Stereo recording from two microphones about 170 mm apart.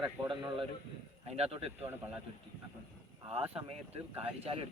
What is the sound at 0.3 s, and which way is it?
Speech, 30° right (ahead or behind).